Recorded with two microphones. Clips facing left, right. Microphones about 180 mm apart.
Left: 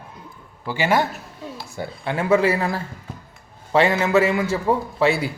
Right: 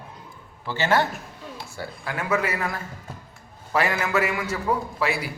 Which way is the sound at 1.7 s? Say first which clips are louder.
Left 6 dB; 25° left (ahead or behind).